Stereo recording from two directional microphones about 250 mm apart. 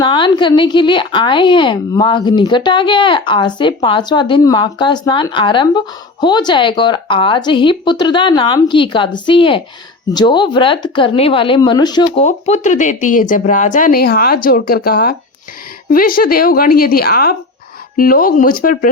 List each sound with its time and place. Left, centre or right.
0.0 s a woman's voice: centre
12.2 s speech: left